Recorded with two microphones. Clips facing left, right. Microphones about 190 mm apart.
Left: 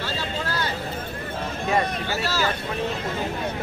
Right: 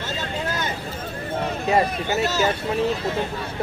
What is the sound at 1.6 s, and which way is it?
Speech, 20° right (ahead or behind).